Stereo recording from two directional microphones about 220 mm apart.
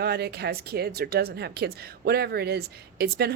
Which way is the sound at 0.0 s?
45° right (ahead or behind).